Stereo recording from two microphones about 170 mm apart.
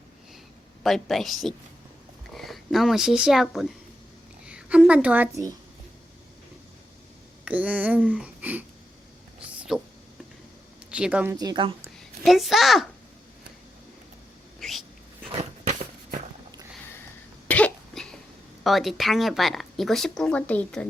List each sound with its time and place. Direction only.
0.8 s a woman's voice: centre (ahead or behind); by 5.5 s 20° right (ahead or behind)
7.4 s speech: 10° right (ahead or behind)
9.6 s a sound: 5° right (ahead or behind)
10.9 s a woman's voice: 10° right (ahead or behind)
11.3 s a woman's voice: 25° right (ahead or behind)
11.9 s a child's voice: centre (ahead or behind)
14.6 s a sound: centre (ahead or behind)
15.3 s biting: 35° right (ahead or behind)
17.5 s cough: 5° left (ahead or behind)
18.6 s speech: centre (ahead or behind)